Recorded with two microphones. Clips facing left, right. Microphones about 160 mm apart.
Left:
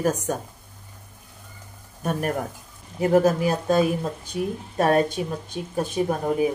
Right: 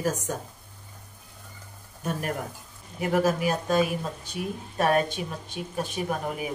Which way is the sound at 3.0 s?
35° left (ahead or behind).